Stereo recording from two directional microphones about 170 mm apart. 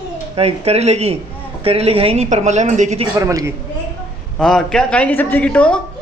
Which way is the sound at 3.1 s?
20° right (ahead or behind).